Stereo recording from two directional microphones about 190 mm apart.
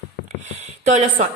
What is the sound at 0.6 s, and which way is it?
Speech, 40° right (ahead or behind).